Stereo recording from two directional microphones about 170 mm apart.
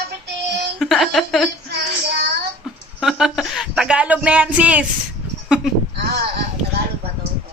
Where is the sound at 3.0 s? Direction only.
Centre (ahead or behind).